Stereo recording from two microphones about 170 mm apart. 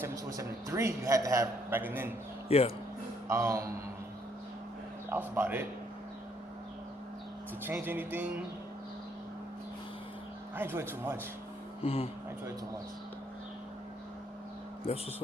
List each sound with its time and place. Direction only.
0.0 s a man's voice: 15° right (ahead or behind)
2.5 s speech: 35° left (ahead or behind)
3.2 s a man's voice: 15° right (ahead or behind)
5.0 s a man's voice: 10° right (ahead or behind)
7.6 s a man's voice: 15° right (ahead or behind)
10.5 s a man's voice: 15° right (ahead or behind)
11.8 s speech: 35° left (ahead or behind)